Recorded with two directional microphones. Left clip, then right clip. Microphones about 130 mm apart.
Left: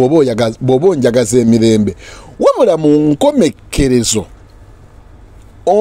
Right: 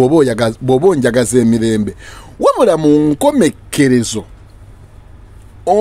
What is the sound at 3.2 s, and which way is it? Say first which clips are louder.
Speech: left 1 dB; 20° left (ahead or behind).